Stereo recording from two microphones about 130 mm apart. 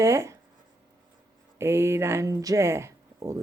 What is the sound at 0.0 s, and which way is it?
Speech, 20° right (ahead or behind).